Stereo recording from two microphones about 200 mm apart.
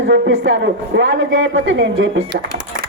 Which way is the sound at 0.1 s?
65° right (ahead or behind).